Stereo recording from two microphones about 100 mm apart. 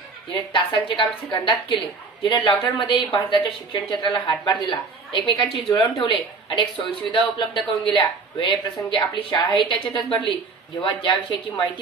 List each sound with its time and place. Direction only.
0.5 s speech: 55° left (ahead or behind)